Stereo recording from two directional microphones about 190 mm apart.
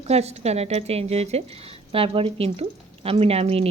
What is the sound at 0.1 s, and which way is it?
A woman's voice, 35° right (ahead or behind).